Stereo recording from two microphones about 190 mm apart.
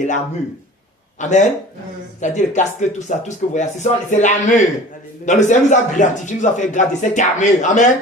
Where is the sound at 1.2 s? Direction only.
40° left (ahead or behind).